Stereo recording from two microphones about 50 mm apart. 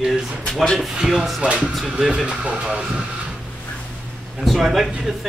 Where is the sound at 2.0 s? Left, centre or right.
Centre.